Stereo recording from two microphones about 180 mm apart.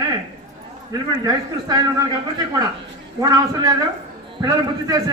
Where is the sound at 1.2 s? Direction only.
20° right (ahead or behind).